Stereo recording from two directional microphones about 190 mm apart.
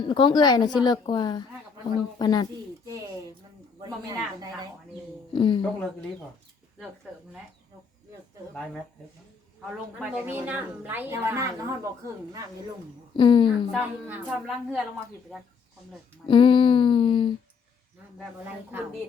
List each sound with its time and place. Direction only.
0.0 s a woman's voice: 25° left (ahead or behind)
3.8 s speech: 20° right (ahead or behind)
5.3 s a woman's voice: 25° left (ahead or behind)
10.0 s a woman's voice: 10° right (ahead or behind)
13.1 s a woman's voice: 25° left (ahead or behind)
13.7 s a woman's voice: 5° right (ahead or behind)
16.2 s a woman's voice: 25° left (ahead or behind)
18.2 s a woman's voice: 10° right (ahead or behind)